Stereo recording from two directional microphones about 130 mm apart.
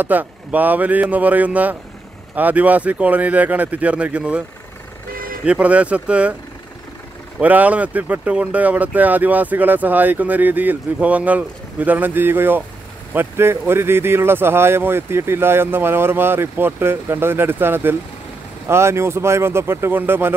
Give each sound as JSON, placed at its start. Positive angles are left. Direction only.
{"t": 0.0, "sound": "speech", "side_deg": -15}
{"t": 7.3, "sound": "speech", "side_deg": -10}